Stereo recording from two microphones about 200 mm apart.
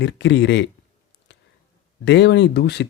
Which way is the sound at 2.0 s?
60° left (ahead or behind).